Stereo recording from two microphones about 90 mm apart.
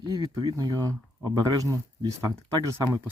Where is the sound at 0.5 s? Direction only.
40° right (ahead or behind).